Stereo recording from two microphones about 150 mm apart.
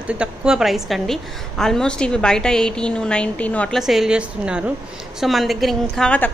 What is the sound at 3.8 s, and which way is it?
Speech, centre (ahead or behind).